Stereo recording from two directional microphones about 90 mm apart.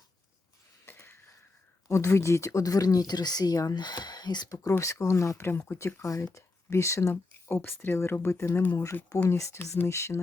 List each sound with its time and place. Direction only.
0.9 s a sound: 25° left (ahead or behind)
1.9 s speech: 35° left (ahead or behind); by 4.5 s 50° left (ahead or behind)
4.8 s speech: 35° left (ahead or behind)